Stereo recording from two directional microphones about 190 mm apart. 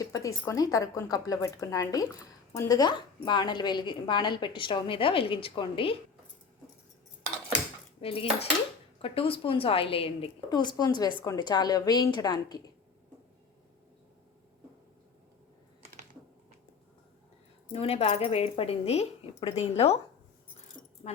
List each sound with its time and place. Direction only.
0.0 s speech: 15° left (ahead or behind)
8.0 s speech: 30° left (ahead or behind)
17.7 s a woman's voice: 30° left (ahead or behind)
21.0 s speech: 30° left (ahead or behind)